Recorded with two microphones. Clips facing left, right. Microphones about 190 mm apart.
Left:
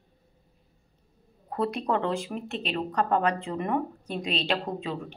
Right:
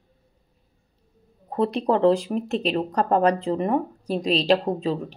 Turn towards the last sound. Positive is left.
turn(degrees=-35)  # may be behind; listen again after turning